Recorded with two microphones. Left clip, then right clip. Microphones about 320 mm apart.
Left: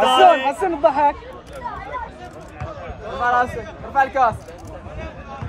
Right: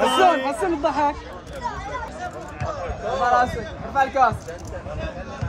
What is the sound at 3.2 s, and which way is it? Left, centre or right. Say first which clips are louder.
A man's voice: left 1 dB; left.